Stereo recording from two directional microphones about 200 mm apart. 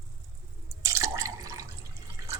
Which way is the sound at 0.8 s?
15° right (ahead or behind).